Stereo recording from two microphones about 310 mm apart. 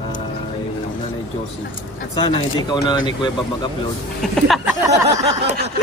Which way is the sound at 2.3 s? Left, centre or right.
Centre.